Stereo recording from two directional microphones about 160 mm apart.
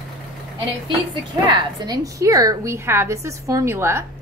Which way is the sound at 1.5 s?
20° right (ahead or behind).